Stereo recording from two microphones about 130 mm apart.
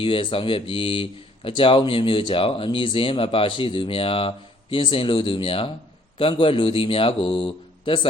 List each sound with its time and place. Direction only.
0.0 s speech: 40° left (ahead or behind)